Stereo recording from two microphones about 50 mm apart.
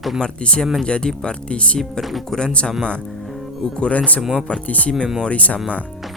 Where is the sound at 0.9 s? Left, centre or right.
Centre.